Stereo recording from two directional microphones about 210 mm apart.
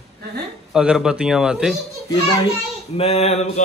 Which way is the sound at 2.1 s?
20° left (ahead or behind).